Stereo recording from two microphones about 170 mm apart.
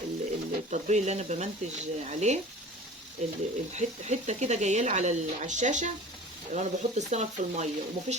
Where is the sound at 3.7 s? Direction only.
45° right (ahead or behind).